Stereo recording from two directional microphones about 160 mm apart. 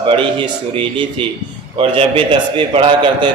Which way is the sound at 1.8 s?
35° right (ahead or behind).